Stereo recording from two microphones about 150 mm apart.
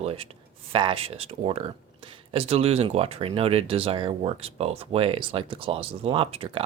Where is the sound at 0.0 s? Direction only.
40° right (ahead or behind).